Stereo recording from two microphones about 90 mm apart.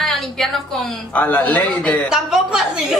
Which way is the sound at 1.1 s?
20° left (ahead or behind).